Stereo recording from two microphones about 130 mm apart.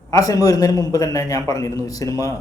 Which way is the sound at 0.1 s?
25° left (ahead or behind).